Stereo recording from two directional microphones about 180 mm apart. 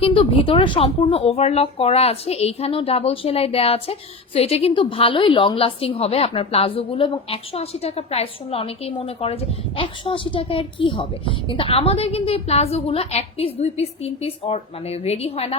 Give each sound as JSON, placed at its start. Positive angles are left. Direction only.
{"t": 0.0, "sound": "a woman's voice", "side_deg": 30}